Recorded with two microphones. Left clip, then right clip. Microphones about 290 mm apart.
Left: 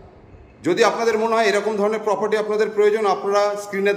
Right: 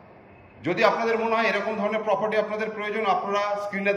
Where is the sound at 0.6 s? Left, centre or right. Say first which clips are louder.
Left 4 dB; centre.